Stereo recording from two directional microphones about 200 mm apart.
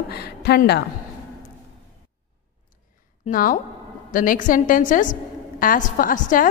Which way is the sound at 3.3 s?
45° left (ahead or behind).